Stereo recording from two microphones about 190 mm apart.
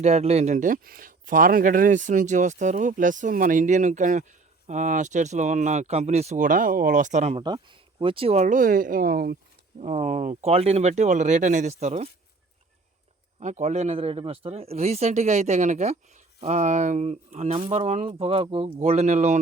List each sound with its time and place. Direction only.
0.0 s a man's voice: 35° right (ahead or behind)
7.4 s speech: 25° right (ahead or behind); by 9.4 s 55° right (ahead or behind)
9.7 s a man's voice: 40° right (ahead or behind)
13.4 s a man's voice: 40° right (ahead or behind)